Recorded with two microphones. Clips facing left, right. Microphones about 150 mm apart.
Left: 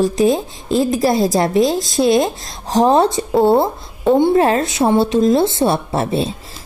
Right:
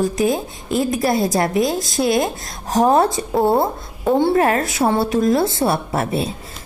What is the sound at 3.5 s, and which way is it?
Speech, centre (ahead or behind).